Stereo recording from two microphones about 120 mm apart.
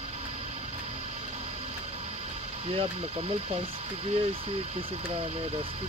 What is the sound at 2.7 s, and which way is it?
Speech, 50° right (ahead or behind).